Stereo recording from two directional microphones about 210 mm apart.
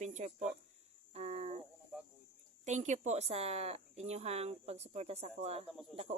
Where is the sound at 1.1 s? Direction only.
30° right (ahead or behind).